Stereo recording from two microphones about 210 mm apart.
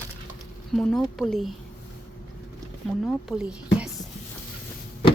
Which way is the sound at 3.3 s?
Centre (ahead or behind).